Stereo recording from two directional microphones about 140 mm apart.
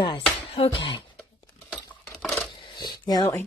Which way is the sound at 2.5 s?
30° left (ahead or behind).